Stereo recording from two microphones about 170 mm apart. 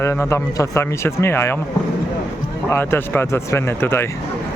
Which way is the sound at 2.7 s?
15° left (ahead or behind).